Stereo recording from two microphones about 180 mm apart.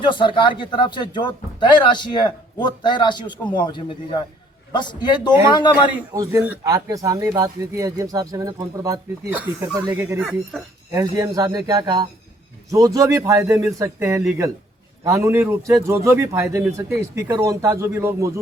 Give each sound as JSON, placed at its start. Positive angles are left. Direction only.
{"t": 0.0, "sound": "a man's voice", "side_deg": 25}
{"t": 6.1, "sound": "speech", "side_deg": -20}